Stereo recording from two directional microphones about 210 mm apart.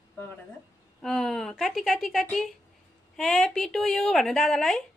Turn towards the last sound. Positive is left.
turn(degrees=0)  # may be behind; listen again after turning